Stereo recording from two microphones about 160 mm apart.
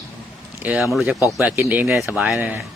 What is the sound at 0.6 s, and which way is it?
Speech, 10° right (ahead or behind).